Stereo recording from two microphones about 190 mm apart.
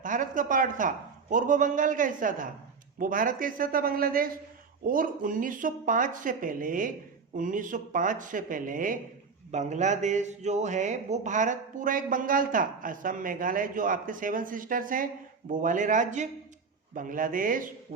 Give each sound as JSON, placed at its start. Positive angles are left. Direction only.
{"t": 0.0, "sound": "speech", "side_deg": -45}